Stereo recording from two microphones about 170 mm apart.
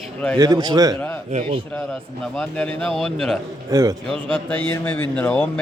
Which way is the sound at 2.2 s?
5° left (ahead or behind).